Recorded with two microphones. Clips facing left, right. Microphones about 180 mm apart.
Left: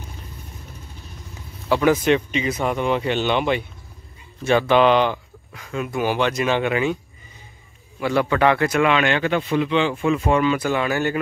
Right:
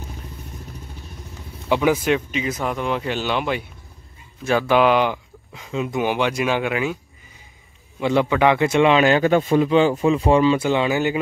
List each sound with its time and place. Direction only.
1.7 s speech: 10° right (ahead or behind)
8.0 s a man's voice: 20° right (ahead or behind)